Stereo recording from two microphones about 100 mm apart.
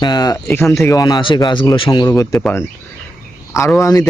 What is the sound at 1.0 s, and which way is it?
Speech, 50° left (ahead or behind).